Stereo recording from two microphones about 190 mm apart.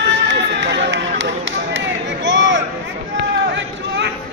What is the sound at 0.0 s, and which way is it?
Run, 65° right (ahead or behind).